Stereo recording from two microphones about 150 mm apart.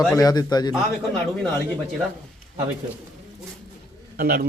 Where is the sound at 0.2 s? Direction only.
25° left (ahead or behind).